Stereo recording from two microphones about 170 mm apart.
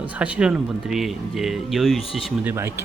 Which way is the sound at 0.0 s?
5° right (ahead or behind).